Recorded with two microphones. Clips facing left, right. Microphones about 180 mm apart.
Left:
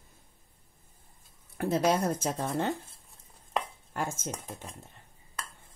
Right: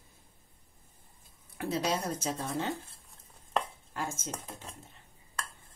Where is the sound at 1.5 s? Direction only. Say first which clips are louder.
Left 5 dB; 50° left (ahead or behind).